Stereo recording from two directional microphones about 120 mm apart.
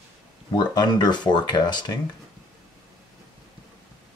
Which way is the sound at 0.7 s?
35° left (ahead or behind).